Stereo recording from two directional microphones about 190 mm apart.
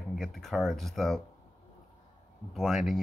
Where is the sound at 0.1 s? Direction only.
Centre (ahead or behind).